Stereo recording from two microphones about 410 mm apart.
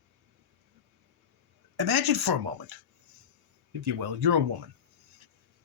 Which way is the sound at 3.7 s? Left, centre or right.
Right.